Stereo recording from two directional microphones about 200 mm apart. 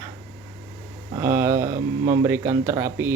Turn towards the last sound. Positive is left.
turn(degrees=-15)  # may be behind; listen again after turning